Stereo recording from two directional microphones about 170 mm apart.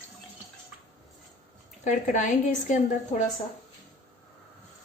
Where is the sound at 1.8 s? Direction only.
45° left (ahead or behind).